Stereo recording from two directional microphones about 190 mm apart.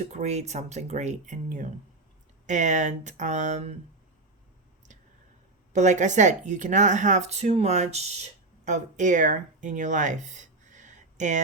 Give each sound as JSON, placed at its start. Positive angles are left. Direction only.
{"t": 0.1, "sound": "speech", "side_deg": -35}
{"t": 5.7, "sound": "speech", "side_deg": -40}